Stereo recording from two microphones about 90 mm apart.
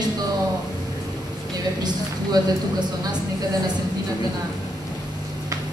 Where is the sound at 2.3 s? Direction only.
50° right (ahead or behind).